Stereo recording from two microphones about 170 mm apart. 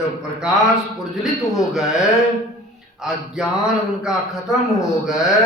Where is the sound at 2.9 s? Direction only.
5° right (ahead or behind).